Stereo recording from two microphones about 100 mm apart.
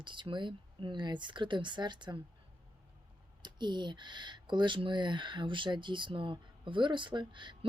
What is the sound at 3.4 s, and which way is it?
Speech, 50° right (ahead or behind).